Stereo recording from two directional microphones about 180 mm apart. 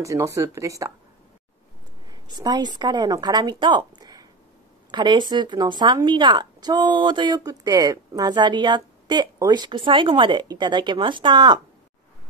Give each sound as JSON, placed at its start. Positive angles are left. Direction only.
{"t": 0.0, "sound": "speech", "side_deg": -15}
{"t": 2.0, "sound": "speech", "side_deg": -20}